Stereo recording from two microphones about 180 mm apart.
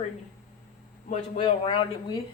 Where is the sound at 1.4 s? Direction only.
25° left (ahead or behind).